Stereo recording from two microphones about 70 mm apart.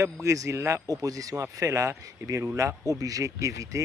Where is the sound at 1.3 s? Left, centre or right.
Right.